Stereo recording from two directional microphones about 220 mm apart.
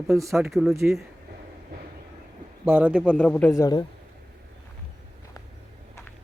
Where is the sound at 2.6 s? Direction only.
10° right (ahead or behind).